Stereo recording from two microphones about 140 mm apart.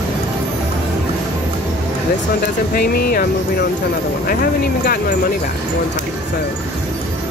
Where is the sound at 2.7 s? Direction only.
90° left.